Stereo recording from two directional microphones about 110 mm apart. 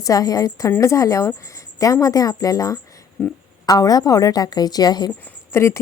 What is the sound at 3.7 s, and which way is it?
Speech, 35° left (ahead or behind).